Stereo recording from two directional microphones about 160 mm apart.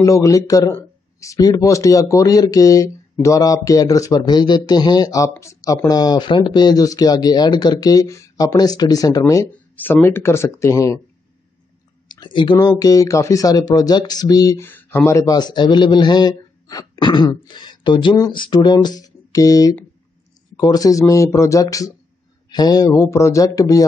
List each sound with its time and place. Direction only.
0.0 s speech: 20° left (ahead or behind)
9.5 s speech: 10° left (ahead or behind)
12.1 s speech: 30° left (ahead or behind)